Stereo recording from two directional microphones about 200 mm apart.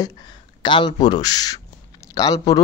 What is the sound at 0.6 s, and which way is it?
Speech, 25° left (ahead or behind).